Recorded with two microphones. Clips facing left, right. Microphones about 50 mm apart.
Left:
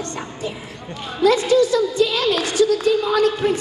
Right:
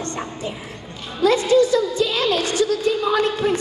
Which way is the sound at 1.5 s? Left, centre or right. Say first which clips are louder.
Even; right.